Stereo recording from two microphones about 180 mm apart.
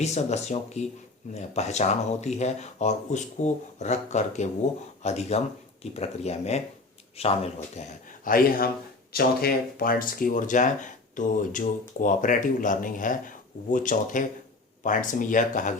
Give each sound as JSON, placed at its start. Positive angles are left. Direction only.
{"t": 0.0, "sound": "speech", "side_deg": 40}
{"t": 8.2, "sound": "speech", "side_deg": 50}